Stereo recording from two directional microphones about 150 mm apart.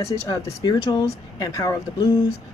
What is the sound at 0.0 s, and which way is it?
Speech, 20° left (ahead or behind).